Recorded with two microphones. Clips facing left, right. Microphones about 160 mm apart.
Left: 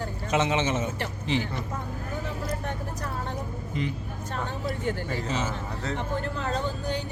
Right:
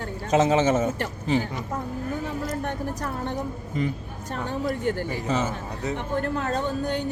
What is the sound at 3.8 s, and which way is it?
Speech, 45° right (ahead or behind).